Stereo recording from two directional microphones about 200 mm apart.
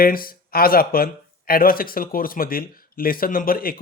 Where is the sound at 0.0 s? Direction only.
45° left (ahead or behind).